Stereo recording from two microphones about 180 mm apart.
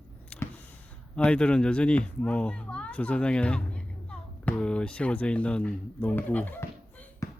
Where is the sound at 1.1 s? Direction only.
5° left (ahead or behind).